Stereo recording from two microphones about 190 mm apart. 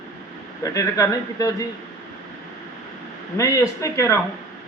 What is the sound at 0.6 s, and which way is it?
Speech, 15° left (ahead or behind).